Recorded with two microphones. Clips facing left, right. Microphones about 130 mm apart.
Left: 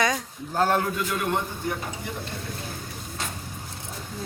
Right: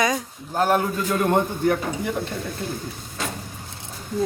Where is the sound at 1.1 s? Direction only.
45° right (ahead or behind).